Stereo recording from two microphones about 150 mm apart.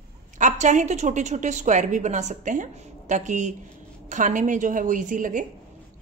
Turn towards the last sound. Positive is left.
turn(degrees=-60)  # may be behind; listen again after turning